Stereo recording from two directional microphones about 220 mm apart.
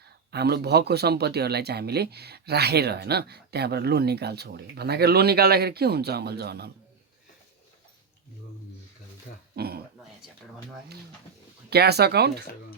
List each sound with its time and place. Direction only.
0.3 s speech: 45° right (ahead or behind)
9.6 s speech: 45° right (ahead or behind)
11.7 s speech: 45° right (ahead or behind)